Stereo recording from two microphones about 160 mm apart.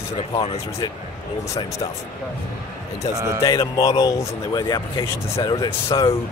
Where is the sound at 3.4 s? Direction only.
20° left (ahead or behind).